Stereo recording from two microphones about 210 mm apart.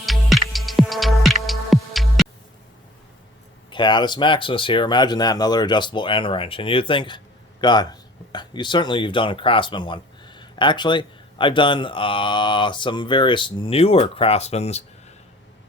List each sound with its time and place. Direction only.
0.0 s music: centre (ahead or behind)
3.7 s speech: 20° left (ahead or behind)